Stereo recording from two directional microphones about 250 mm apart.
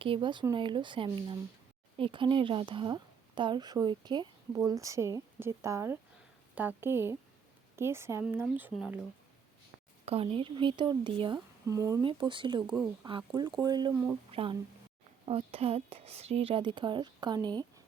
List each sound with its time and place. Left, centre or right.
0.0 s a woman's voice: centre
10.1 s speech: right
12.7 s speech: centre
13.1 s a woman's voice: centre
14.3 s speech: right